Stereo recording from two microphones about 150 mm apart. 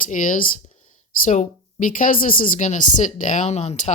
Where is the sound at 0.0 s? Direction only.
60° left (ahead or behind).